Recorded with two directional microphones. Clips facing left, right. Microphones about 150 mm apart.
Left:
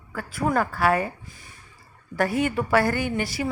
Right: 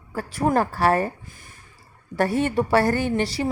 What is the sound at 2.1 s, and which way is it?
A woman's voice, 35° right (ahead or behind).